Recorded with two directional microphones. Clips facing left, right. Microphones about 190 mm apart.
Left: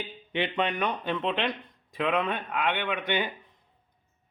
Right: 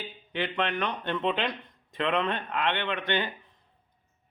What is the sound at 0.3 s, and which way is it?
Speech, 15° left (ahead or behind).